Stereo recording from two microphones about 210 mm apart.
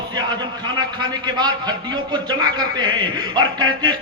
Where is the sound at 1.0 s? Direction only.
20° right (ahead or behind).